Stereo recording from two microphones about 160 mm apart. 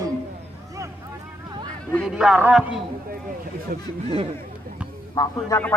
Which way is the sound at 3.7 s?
60° right (ahead or behind).